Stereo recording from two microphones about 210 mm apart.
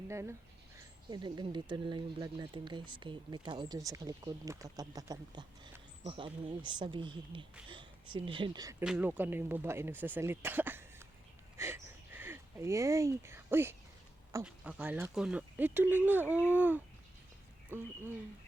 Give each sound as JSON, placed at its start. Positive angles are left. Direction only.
{"t": 0.1, "sound": "speech", "side_deg": -10}
{"t": 8.8, "sound": "speech", "side_deg": -5}
{"t": 11.5, "sound": "a sound", "side_deg": -10}
{"t": 14.4, "sound": "speech", "side_deg": -5}